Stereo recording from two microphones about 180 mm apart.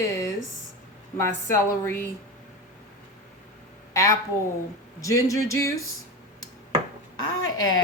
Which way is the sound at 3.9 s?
15° left (ahead or behind).